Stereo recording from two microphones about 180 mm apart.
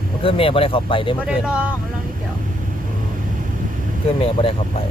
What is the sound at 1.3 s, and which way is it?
Speech, 5° right (ahead or behind).